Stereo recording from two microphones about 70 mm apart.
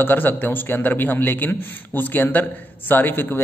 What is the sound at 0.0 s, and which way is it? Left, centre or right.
A man's voice, left.